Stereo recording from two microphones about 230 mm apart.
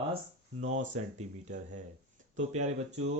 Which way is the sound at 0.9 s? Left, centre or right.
Right.